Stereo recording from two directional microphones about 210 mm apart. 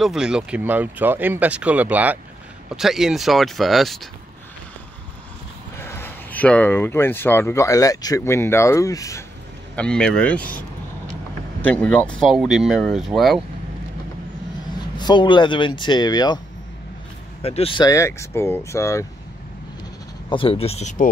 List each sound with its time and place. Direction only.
0.0 s speech: 5° right (ahead or behind)
5.8 s speech: 10° left (ahead or behind)
9.8 s speech: 5° left (ahead or behind)
11.6 s speech: 5° left (ahead or behind)
15.0 s speech: 20° left (ahead or behind)
17.4 s speech: 25° left (ahead or behind)
20.2 s speech: 25° left (ahead or behind)